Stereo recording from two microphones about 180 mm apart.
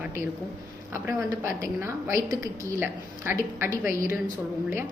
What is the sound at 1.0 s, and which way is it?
A woman's voice, 15° right (ahead or behind).